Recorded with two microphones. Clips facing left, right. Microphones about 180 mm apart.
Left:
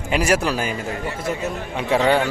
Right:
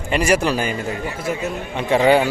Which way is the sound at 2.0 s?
10° right (ahead or behind).